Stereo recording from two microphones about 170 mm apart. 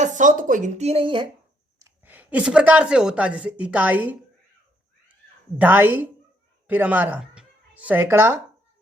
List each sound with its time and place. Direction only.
0.0 s speech: 45° right (ahead or behind); by 1.3 s 30° right (ahead or behind)
1.8 s a woman's voice: 10° right (ahead or behind)
5.5 s a woman's voice: 10° right (ahead or behind)